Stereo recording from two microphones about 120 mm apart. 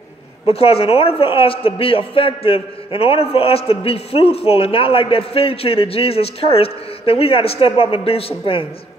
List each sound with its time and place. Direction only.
0.5 s a man's voice: 55° left (ahead or behind)